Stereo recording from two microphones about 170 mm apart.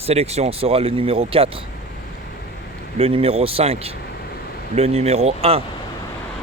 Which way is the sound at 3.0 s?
35° right (ahead or behind).